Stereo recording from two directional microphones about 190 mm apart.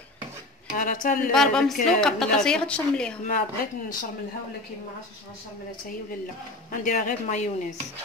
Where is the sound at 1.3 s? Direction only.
5° left (ahead or behind).